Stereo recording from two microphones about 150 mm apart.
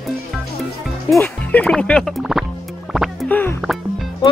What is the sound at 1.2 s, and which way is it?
Speech, 10° left (ahead or behind).